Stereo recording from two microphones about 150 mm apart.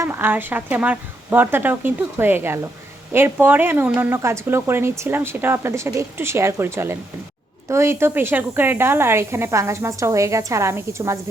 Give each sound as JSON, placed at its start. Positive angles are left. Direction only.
{"t": 0.0, "sound": "speech", "side_deg": -15}